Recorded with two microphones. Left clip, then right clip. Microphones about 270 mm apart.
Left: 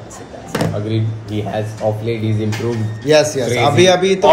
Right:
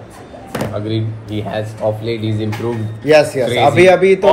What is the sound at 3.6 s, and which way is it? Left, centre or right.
Speech, right.